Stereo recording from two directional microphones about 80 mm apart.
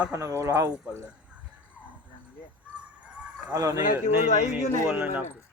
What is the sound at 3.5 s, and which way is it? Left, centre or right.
Speech, right.